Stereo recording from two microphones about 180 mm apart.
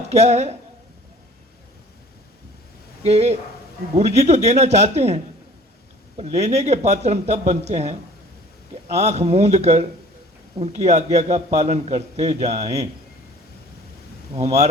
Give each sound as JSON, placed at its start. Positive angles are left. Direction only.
{"t": 0.1, "sound": "a man's voice", "side_deg": -35}
{"t": 3.0, "sound": "a man's voice", "side_deg": -35}
{"t": 14.3, "sound": "a man's voice", "side_deg": -35}